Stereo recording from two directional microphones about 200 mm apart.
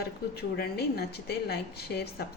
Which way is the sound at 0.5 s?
55° left (ahead or behind).